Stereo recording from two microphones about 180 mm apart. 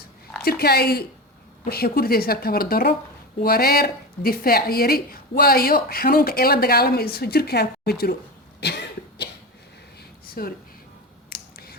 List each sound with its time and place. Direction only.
0.4 s a woman's voice: 60° left (ahead or behind)
8.6 s cough: 65° left (ahead or behind)
10.4 s a woman's voice: 55° left (ahead or behind)
11.3 s scissors: 55° left (ahead or behind)